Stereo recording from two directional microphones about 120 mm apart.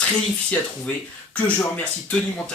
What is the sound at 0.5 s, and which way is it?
Speech, 15° left (ahead or behind).